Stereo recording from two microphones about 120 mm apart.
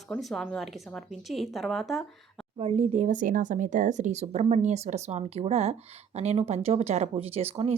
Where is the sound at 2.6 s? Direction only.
55° right (ahead or behind).